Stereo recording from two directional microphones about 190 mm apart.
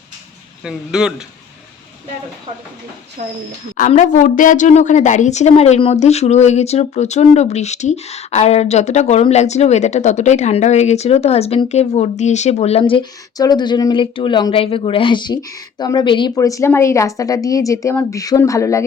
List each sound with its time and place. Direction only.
0.6 s speech: 5° right (ahead or behind)
3.2 s a woman's voice: 40° right (ahead or behind)
3.8 s a woman's voice: 40° left (ahead or behind)
12.8 s speech: 25° left (ahead or behind)